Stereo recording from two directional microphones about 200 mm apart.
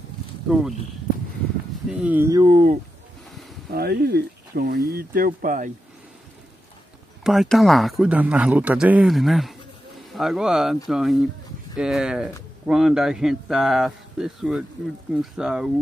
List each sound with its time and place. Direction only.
0.5 s a man's voice: 5° right (ahead or behind)
1.9 s speech: 5° right (ahead or behind)
2.5 s speech: 35° right (ahead or behind)
3.7 s speech: 50° right (ahead or behind)
7.2 s a man's voice: centre (ahead or behind)